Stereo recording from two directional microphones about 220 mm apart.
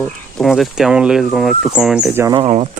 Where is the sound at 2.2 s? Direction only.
25° right (ahead or behind).